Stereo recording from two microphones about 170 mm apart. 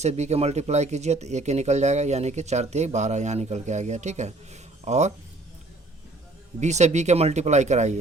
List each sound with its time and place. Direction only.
0.0 s speech: 40° right (ahead or behind)
6.6 s speech: 40° right (ahead or behind)